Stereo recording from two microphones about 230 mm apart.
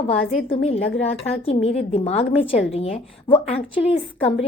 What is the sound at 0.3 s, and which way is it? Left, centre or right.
A woman's voice, left.